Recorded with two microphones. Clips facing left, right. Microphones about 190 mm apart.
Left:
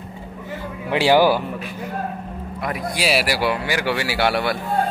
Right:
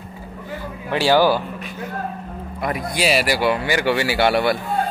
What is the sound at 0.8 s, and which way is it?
Speech, 20° left (ahead or behind).